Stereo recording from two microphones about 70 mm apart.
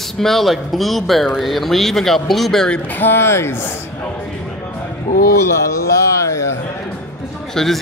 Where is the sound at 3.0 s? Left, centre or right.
Left.